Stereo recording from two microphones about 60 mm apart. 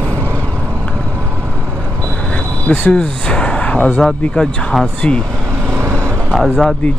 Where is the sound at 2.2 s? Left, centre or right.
Centre.